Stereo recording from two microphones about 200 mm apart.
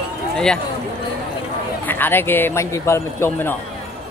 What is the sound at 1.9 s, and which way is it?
Speech, 10° left (ahead or behind).